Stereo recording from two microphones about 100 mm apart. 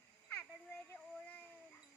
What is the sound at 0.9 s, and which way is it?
Child singing, 15° left (ahead or behind).